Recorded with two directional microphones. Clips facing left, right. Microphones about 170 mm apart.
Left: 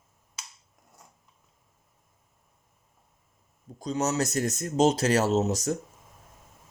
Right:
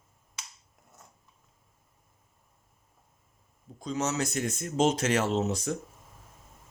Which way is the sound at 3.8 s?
35° left (ahead or behind).